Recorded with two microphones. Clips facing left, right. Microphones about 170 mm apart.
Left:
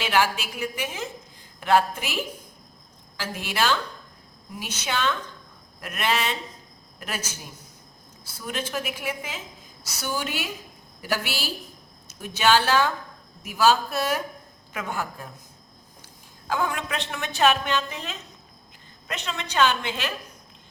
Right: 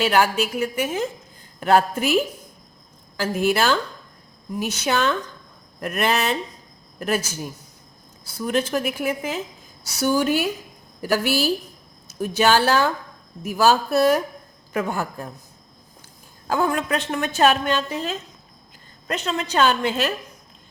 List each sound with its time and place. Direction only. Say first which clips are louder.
0.0 s a woman's voice: right 5 dB; 45° right (ahead or behind)
3.2 s a woman's voice: right 7 dB; 45° right (ahead or behind)
8.4 s a woman's voice: right 8 dB; 45° right (ahead or behind)
16.5 s a woman's voice: right 6 dB; 40° right (ahead or behind)